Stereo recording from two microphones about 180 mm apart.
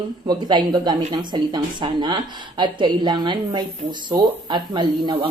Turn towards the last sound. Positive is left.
turn(degrees=-25)  # may be behind; listen again after turning